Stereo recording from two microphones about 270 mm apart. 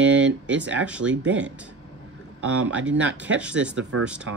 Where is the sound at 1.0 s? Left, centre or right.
Right.